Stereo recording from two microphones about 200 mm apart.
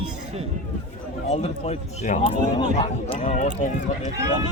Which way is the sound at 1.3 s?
30° left (ahead or behind).